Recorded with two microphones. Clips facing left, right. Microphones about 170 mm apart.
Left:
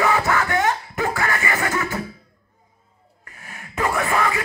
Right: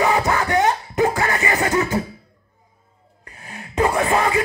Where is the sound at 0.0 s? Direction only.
20° right (ahead or behind).